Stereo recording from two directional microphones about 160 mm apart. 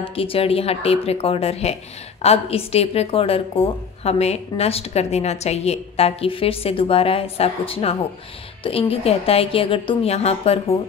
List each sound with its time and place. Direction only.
0.1 s speech: 35° left (ahead or behind)